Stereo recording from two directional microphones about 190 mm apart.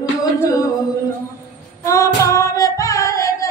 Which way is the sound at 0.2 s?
15° left (ahead or behind).